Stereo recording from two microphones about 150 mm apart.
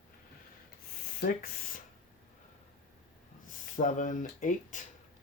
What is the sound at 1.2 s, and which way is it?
Speech, 65° left (ahead or behind).